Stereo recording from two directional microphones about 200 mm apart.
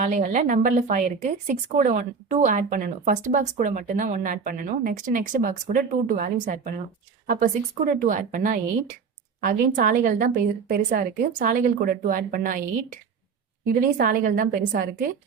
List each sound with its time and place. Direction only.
0.0 s a woman's voice: 40° right (ahead or behind)